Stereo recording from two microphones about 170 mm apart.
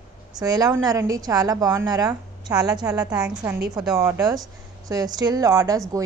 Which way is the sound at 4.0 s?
20° right (ahead or behind).